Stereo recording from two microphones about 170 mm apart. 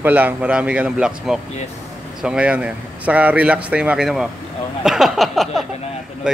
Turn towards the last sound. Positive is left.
turn(degrees=0)  # may be behind; listen again after turning